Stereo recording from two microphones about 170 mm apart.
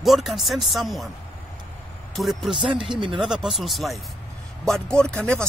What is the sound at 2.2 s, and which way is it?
Speech, centre (ahead or behind).